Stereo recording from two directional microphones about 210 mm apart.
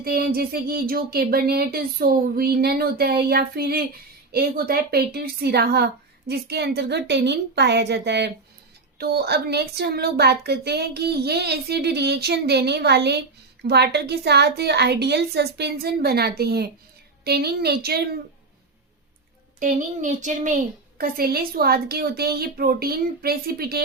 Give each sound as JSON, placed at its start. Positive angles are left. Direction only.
{"t": 0.0, "sound": "speech", "side_deg": -45}
{"t": 19.5, "sound": "speech", "side_deg": -35}